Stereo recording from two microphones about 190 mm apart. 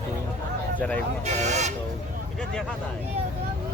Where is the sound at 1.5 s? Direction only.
35° right (ahead or behind).